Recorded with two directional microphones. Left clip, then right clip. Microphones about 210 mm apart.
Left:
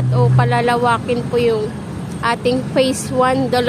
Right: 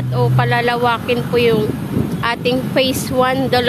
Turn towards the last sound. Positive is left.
turn(degrees=0)  # may be behind; listen again after turning